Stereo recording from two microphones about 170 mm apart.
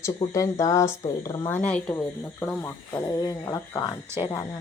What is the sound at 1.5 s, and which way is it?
A woman's voice, 10° left (ahead or behind).